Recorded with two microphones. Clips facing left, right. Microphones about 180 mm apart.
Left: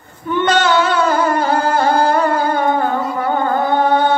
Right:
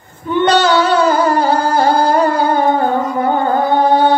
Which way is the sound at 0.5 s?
35° right (ahead or behind).